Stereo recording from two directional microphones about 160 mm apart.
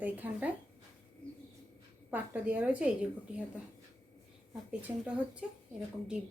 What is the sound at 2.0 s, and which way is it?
Speech, 10° right (ahead or behind).